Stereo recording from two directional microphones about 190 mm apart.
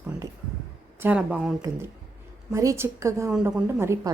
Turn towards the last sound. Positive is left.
turn(degrees=-15)  # may be behind; listen again after turning